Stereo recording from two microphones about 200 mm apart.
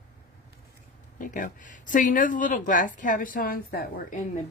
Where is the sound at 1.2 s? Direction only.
40° left (ahead or behind).